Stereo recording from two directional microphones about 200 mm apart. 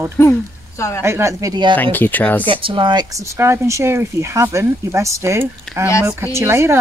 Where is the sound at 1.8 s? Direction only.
10° left (ahead or behind).